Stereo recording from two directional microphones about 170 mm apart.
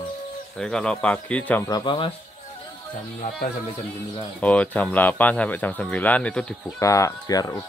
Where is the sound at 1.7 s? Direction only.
30° left (ahead or behind).